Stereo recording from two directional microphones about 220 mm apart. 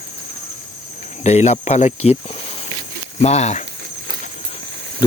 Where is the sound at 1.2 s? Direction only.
30° left (ahead or behind).